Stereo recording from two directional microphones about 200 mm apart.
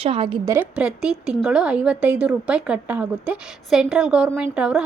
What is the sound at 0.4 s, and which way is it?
A woman's voice, 10° right (ahead or behind).